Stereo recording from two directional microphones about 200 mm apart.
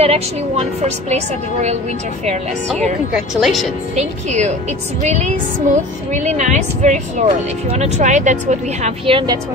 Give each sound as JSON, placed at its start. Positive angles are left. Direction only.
{"t": 0.0, "sound": "a woman's voice", "side_deg": -30}
{"t": 3.1, "sound": "speech", "side_deg": 0}
{"t": 3.9, "sound": "a woman's voice", "side_deg": -35}